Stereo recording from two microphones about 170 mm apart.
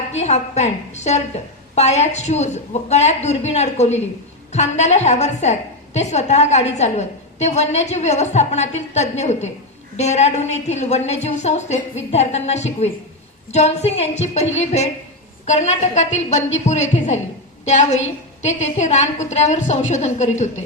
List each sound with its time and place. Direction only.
0.1 s a woman's voice: 40° left (ahead or behind)